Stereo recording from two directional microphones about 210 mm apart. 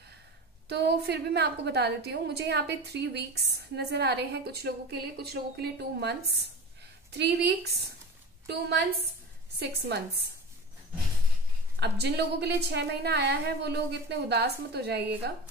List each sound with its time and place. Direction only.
0.7 s a woman's voice: 50° right (ahead or behind)
11.8 s a woman's voice: 50° right (ahead or behind)